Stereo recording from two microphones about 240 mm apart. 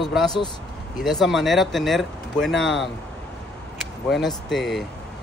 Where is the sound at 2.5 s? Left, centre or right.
Left.